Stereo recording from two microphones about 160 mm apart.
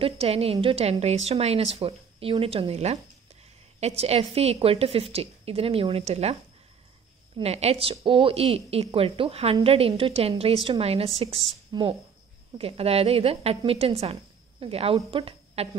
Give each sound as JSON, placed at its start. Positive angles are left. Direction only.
{"t": 0.0, "sound": "speech", "side_deg": -40}
{"t": 7.3, "sound": "a woman's voice", "side_deg": -40}